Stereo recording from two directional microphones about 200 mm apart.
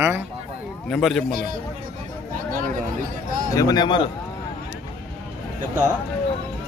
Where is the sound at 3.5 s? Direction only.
20° left (ahead or behind).